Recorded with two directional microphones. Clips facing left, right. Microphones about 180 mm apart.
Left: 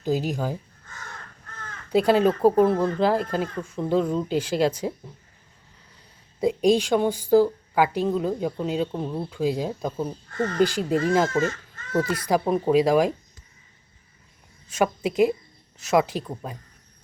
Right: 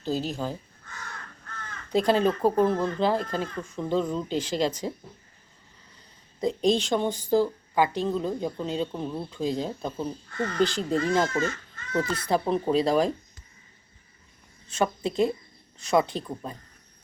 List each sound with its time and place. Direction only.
0.0 s a woman's voice: 15° left (ahead or behind)
1.9 s a woman's voice: 10° left (ahead or behind)
6.4 s a woman's voice: 10° left (ahead or behind)
10.3 s speech: 45° left (ahead or behind)
10.6 s a woman's voice: 10° left (ahead or behind)
14.7 s a woman's voice: 10° left (ahead or behind)